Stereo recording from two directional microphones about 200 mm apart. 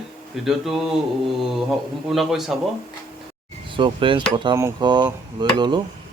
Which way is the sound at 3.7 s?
25° right (ahead or behind).